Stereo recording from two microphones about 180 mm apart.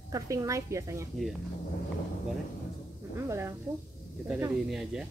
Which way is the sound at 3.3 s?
15° right (ahead or behind).